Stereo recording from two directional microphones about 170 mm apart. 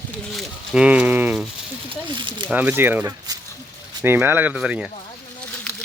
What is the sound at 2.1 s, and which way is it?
Speech, 30° right (ahead or behind).